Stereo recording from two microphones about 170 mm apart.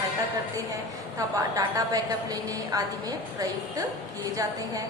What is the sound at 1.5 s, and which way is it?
A woman's voice, 20° right (ahead or behind).